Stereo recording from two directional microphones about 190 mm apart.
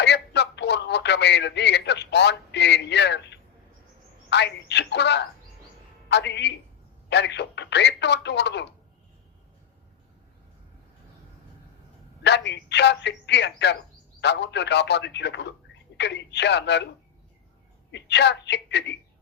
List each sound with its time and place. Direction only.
0.0 s a sound: 65° left (ahead or behind)
4.3 s speech: 65° left (ahead or behind)
12.2 s speech: 65° left (ahead or behind)
17.9 s speech: 65° left (ahead or behind)